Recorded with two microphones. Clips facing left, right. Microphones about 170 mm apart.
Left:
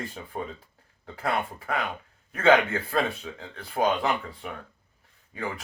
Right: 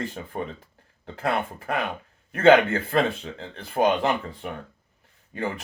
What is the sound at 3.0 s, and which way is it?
Speech, 25° right (ahead or behind).